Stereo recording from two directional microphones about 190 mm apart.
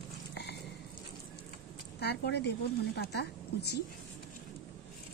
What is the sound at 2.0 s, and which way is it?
Speech, 60° left (ahead or behind).